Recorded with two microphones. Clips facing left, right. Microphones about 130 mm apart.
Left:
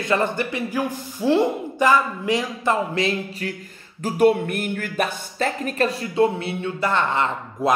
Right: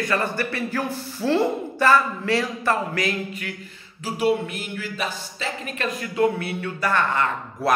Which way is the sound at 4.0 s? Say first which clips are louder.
Left 5 dB; 50° left (ahead or behind).